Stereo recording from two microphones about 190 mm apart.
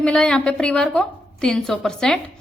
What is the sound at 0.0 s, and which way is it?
A woman's voice, 5° left (ahead or behind).